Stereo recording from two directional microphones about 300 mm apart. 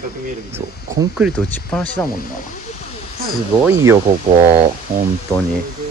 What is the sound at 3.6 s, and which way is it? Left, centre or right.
Speech, centre.